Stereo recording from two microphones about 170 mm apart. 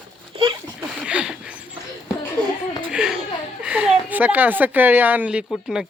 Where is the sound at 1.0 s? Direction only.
5° right (ahead or behind).